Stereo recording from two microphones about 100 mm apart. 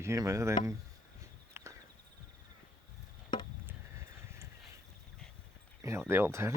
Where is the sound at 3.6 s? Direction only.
25° right (ahead or behind).